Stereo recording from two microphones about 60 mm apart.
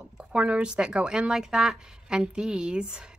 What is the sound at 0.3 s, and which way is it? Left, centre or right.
A woman's voice, centre.